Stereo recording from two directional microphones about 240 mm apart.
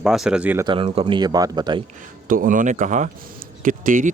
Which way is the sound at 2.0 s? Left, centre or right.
Right.